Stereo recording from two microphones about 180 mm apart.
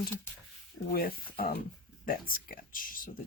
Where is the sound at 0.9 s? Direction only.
55° left (ahead or behind).